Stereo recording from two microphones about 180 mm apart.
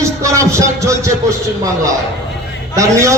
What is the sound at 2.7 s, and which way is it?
Speech, 15° right (ahead or behind).